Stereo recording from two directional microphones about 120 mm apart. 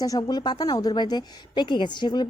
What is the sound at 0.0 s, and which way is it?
A woman's voice, 35° left (ahead or behind).